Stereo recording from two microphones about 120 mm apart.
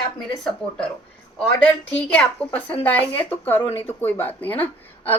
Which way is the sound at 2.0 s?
10° left (ahead or behind).